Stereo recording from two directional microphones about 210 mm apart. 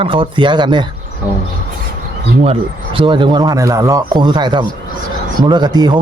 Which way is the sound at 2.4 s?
25° right (ahead or behind).